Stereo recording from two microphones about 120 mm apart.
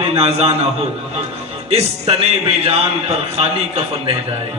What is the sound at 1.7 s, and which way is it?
A man's voice, 55° right (ahead or behind).